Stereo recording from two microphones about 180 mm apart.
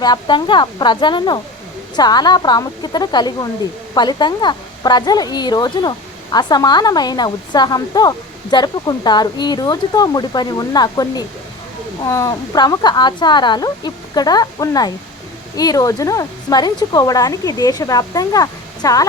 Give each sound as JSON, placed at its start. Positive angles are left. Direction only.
{"t": 0.0, "sound": "a woman's voice", "side_deg": 25}